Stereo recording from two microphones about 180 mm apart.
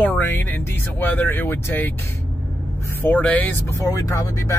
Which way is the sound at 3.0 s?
10° left (ahead or behind).